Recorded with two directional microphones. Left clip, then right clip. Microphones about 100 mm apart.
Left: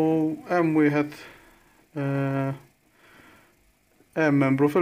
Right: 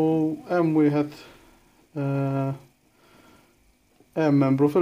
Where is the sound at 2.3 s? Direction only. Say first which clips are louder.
Even; 15° right (ahead or behind).